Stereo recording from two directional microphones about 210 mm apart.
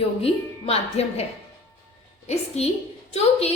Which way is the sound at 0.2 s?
30° left (ahead or behind).